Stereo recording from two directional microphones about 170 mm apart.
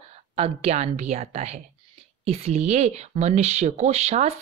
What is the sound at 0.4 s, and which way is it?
Speech, 40° right (ahead or behind).